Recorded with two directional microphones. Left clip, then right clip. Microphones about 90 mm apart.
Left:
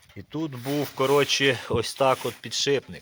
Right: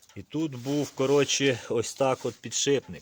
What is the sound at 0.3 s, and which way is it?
Speech, 30° right (ahead or behind).